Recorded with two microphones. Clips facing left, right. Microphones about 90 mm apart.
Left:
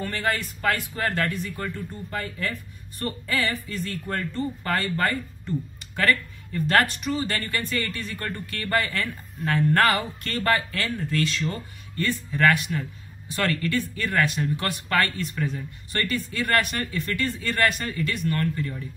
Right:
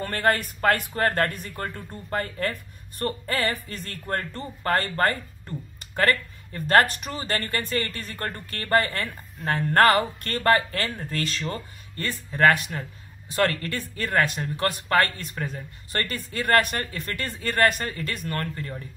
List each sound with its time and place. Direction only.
0.0 s speech: 50° right (ahead or behind)